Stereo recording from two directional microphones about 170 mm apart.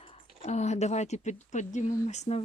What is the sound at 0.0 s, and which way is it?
Speech, 35° left (ahead or behind).